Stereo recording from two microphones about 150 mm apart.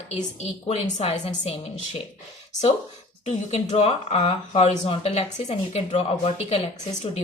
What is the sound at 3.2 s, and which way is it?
A woman's voice, 45° left (ahead or behind).